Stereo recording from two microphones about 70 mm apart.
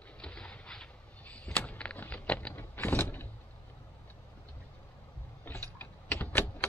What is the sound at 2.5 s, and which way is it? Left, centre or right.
Vehicle, left.